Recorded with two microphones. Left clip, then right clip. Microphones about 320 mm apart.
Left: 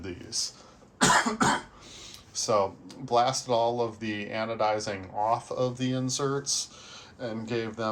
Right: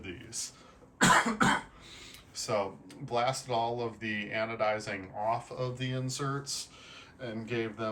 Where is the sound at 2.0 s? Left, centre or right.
Centre.